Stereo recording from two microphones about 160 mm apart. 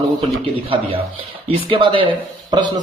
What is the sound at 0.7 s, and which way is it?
Speech, 35° right (ahead or behind).